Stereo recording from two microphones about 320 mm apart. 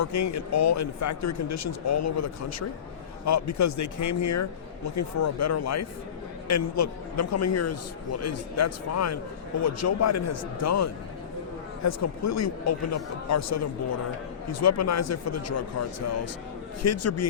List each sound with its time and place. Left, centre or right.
0.0 s a man's voice: left